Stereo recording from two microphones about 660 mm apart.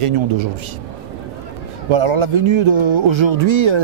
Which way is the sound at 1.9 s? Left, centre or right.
Right.